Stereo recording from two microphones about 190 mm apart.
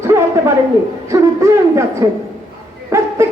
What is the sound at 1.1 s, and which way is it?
Speech, 15° right (ahead or behind).